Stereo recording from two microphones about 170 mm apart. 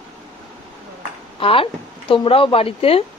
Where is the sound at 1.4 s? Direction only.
30° left (ahead or behind).